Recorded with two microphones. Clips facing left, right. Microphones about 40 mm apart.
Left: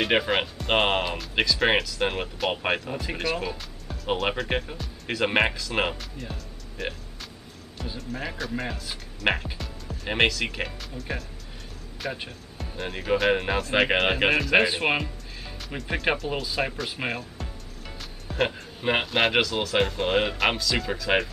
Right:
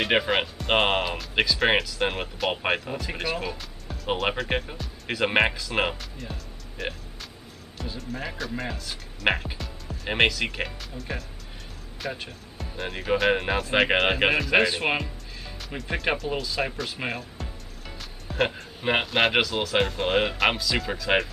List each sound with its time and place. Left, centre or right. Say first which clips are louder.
0.0 s speech: even; centre
12.3 s speech: even; centre